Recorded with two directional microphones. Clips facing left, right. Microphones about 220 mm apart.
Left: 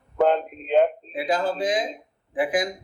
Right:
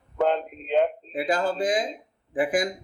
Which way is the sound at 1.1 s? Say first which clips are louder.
Left 1 dB; 50° right (ahead or behind).